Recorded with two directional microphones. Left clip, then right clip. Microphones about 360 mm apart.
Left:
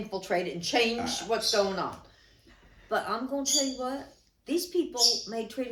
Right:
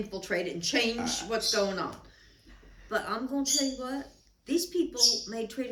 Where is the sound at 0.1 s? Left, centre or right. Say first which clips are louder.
Left 4 dB; centre.